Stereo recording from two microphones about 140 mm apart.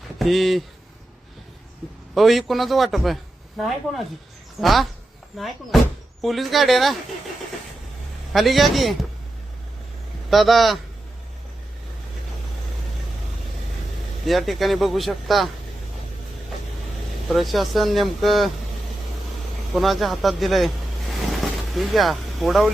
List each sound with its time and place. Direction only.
0.2 s speech: centre (ahead or behind)
2.1 s speech: centre (ahead or behind)
8.3 s speech: centre (ahead or behind)
10.2 s speech: centre (ahead or behind)
14.3 s speech: centre (ahead or behind)
17.2 s speech: centre (ahead or behind)
19.7 s speech: centre (ahead or behind)
21.8 s speech: centre (ahead or behind)